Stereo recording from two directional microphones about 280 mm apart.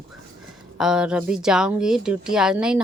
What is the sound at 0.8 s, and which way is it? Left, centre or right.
Speech, centre.